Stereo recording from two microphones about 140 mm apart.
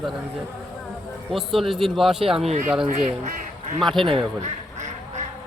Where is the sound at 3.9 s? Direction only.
35° right (ahead or behind).